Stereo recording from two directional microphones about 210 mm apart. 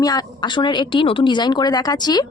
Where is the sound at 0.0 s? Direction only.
20° left (ahead or behind).